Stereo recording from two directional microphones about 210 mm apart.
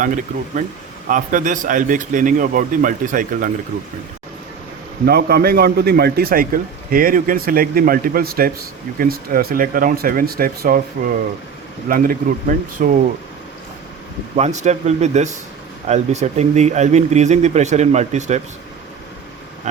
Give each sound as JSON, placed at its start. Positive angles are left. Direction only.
{"t": 0.6, "sound": "speech", "side_deg": -40}
{"t": 5.0, "sound": "a man's voice", "side_deg": -50}
{"t": 14.3, "sound": "speech", "side_deg": -30}
{"t": 19.7, "sound": "speech", "side_deg": -35}